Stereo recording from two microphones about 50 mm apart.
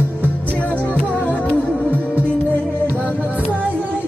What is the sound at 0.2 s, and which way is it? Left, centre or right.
Music, left.